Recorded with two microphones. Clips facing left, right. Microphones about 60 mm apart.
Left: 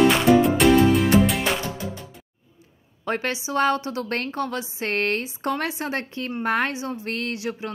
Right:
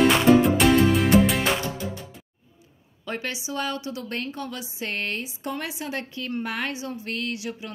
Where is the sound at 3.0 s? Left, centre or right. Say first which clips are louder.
Left 5 dB; left.